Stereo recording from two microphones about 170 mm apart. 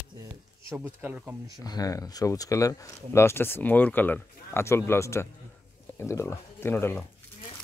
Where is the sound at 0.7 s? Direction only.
10° right (ahead or behind).